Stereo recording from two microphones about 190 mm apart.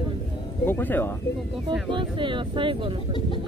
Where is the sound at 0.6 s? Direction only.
10° left (ahead or behind).